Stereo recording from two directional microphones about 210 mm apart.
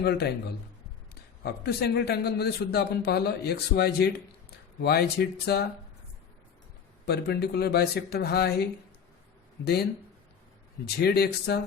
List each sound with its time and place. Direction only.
0.0 s a man's voice: 50° left (ahead or behind)
7.0 s a man's voice: 50° left (ahead or behind)
10.8 s a man's voice: 50° left (ahead or behind)